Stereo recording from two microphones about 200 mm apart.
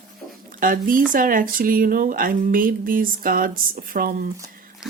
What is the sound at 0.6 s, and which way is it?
Speech, 45° right (ahead or behind).